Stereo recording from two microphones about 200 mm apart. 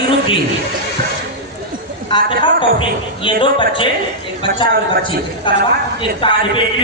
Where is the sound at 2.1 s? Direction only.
25° left (ahead or behind).